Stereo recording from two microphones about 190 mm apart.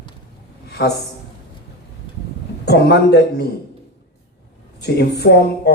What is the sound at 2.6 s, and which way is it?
Speech, 60° left (ahead or behind).